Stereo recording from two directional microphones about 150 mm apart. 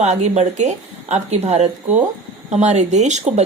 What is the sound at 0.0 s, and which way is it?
Speech, 50° right (ahead or behind).